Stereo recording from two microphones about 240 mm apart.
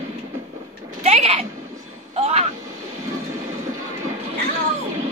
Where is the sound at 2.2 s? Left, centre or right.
Right.